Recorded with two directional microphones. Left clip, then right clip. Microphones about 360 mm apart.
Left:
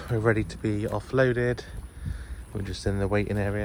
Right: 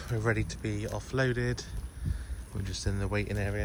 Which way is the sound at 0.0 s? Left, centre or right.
Centre.